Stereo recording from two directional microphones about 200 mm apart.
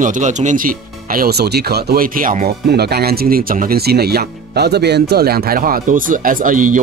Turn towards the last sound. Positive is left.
turn(degrees=-40)  # may be behind; listen again after turning